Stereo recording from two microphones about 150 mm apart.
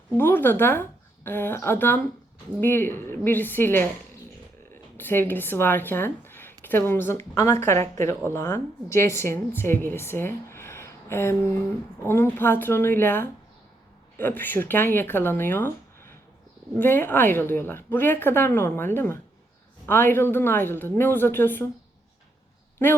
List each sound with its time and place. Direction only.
0.2 s a woman's voice: 15° left (ahead or behind)